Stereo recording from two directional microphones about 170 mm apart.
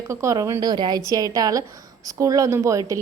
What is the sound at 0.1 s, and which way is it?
A woman's voice, 20° right (ahead or behind).